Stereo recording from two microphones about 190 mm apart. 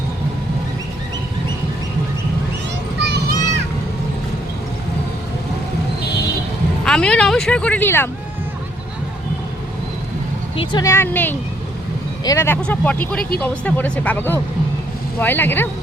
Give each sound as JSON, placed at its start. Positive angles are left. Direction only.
{"t": 3.0, "sound": "children playing", "side_deg": -60}
{"t": 6.8, "sound": "speech", "side_deg": 5}
{"t": 10.6, "sound": "speech", "side_deg": 25}